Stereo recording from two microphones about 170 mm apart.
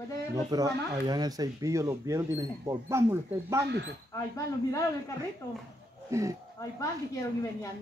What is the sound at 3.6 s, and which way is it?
Speech, 80° right.